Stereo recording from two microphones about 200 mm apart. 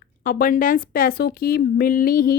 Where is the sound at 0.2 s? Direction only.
45° left (ahead or behind).